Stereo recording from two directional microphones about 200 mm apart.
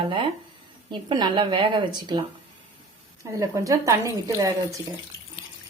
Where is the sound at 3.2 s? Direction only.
15° right (ahead or behind).